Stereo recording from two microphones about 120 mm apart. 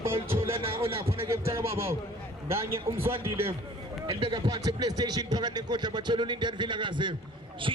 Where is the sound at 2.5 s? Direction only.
20° right (ahead or behind).